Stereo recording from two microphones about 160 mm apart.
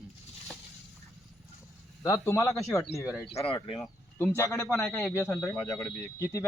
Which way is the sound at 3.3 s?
40° left (ahead or behind).